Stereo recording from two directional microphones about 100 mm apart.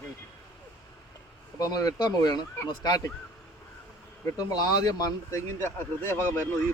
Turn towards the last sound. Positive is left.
turn(degrees=25)  # may be behind; listen again after turning